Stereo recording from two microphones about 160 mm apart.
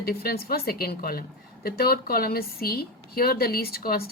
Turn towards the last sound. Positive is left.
turn(degrees=70)  # may be behind; listen again after turning